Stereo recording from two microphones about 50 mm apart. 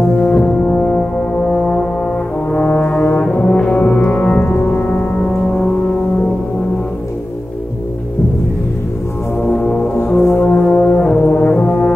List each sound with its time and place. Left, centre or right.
0.1 s brass instrument: left
4.5 s music: left
4.8 s music: left
9.4 s music: left
10.5 s brass instrument: left